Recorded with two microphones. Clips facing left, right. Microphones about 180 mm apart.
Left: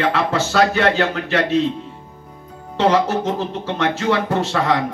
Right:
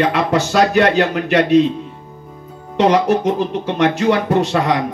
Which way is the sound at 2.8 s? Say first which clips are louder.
Right 3 dB; 15° right (ahead or behind).